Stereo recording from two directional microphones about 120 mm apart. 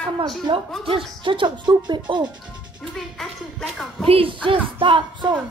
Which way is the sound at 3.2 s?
Centre (ahead or behind).